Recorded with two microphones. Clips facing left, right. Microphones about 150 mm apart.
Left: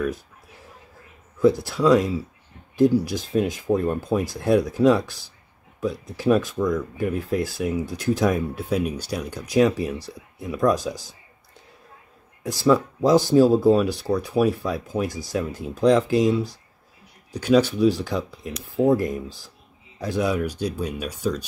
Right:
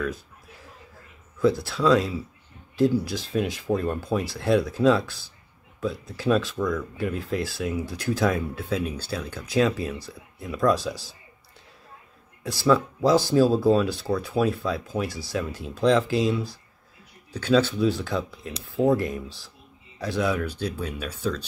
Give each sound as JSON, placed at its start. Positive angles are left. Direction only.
{"t": 1.4, "sound": "speech", "side_deg": 15}
{"t": 12.4, "sound": "speech", "side_deg": 15}